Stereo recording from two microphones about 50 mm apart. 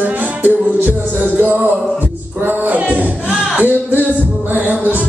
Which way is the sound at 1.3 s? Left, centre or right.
Right.